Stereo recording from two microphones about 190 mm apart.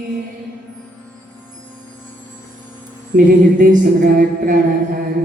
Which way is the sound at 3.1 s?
45° right (ahead or behind).